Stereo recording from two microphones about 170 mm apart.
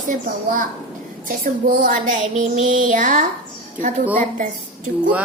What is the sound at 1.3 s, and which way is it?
Child singing, 55° right (ahead or behind).